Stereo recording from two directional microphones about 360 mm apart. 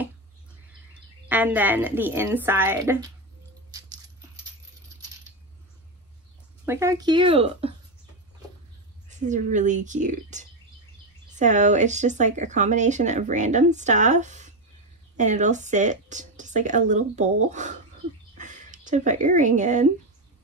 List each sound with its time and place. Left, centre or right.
0.9 s a woman's voice: centre
6.6 s speech: centre
9.1 s speech: centre